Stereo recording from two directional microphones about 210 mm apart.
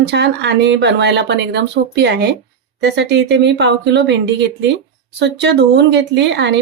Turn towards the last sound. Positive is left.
turn(degrees=-55)  # may be behind; listen again after turning